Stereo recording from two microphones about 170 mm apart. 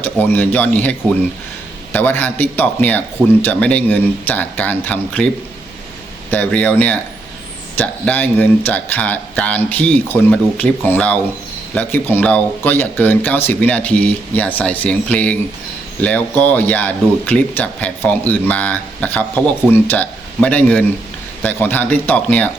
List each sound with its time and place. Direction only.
0.0 s speech: 10° left (ahead or behind)
6.3 s speech: 10° left (ahead or behind)